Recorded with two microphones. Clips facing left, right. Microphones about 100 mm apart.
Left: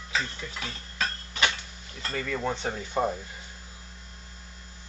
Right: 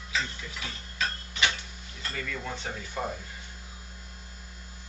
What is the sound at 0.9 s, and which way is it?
Tick-tock, 45° left (ahead or behind).